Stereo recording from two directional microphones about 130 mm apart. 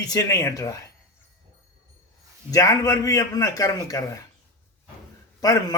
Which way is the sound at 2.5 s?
25° left (ahead or behind).